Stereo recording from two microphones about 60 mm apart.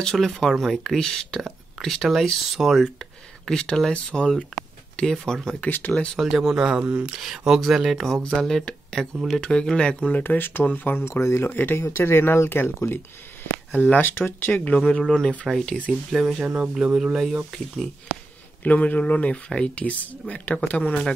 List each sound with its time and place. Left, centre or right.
0.0 s speech: centre
3.4 s speech: centre
5.6 s speech: left
6.1 s speech: centre
6.9 s speech: right
7.2 s speech: centre
10.2 s speech: left
11.0 s speech: left
14.9 s speech: centre
15.9 s speech: centre
16.4 s speech: right
16.7 s speech: centre
18.6 s speech: left